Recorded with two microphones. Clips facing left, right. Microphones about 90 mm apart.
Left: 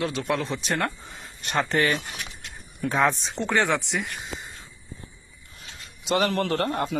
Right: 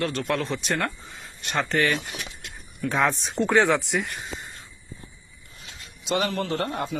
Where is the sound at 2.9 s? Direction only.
Centre (ahead or behind).